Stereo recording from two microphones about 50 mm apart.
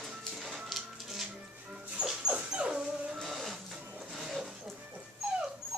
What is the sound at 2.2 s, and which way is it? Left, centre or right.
Dog, centre.